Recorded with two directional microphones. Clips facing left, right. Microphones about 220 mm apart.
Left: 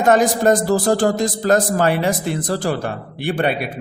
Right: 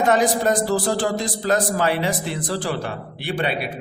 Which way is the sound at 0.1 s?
45° left (ahead or behind).